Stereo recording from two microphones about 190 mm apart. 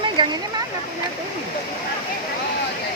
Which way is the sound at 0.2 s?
25° right (ahead or behind).